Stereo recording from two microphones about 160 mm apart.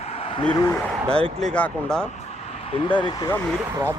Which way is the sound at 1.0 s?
35° right (ahead or behind).